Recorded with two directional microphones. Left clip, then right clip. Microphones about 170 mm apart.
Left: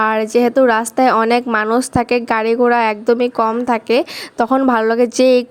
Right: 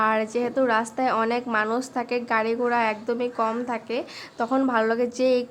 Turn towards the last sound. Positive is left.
turn(degrees=50)  # may be behind; listen again after turning